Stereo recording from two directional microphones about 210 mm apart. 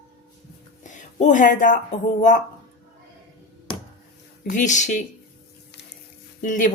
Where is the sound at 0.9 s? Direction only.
35° left (ahead or behind).